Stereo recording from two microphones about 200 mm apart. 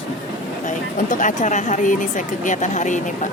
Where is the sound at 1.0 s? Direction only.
40° left (ahead or behind).